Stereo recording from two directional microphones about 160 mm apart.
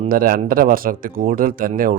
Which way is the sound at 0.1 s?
65° right (ahead or behind).